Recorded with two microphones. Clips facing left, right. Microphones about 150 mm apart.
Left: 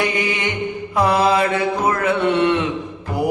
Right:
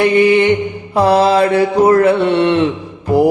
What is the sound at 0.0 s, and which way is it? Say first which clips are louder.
Mantra: right 11 dB; 30° right (ahead or behind).